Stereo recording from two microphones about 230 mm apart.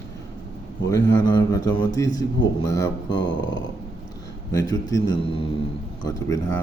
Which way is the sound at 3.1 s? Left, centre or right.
Left.